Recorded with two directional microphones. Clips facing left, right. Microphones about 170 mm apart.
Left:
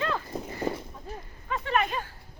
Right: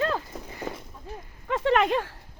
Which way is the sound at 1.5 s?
85° right.